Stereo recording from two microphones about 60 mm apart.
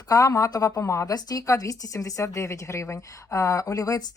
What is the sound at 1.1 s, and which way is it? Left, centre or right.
Speech, left.